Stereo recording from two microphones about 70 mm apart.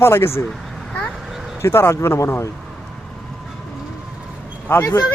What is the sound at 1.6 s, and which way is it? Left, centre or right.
Speech, left.